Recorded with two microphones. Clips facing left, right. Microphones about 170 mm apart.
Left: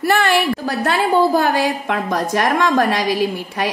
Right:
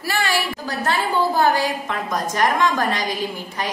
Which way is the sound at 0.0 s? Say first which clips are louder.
Left 7 dB; 60° left (ahead or behind).